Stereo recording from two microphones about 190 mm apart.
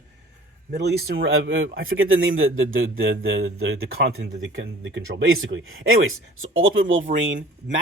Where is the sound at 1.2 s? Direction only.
90° right; by 4.3 s 65° right (ahead or behind).